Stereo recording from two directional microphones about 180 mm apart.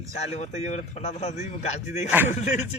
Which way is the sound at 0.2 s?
35° left (ahead or behind).